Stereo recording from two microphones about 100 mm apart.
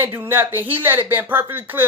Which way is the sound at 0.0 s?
20° right (ahead or behind).